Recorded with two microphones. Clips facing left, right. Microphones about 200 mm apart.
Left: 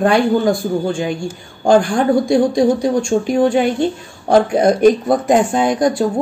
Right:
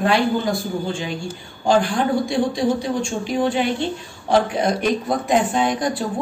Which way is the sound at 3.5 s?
50° left (ahead or behind).